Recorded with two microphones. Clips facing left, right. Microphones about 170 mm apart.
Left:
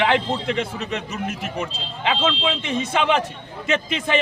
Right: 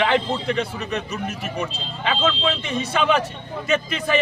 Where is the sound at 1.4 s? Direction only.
20° left (ahead or behind).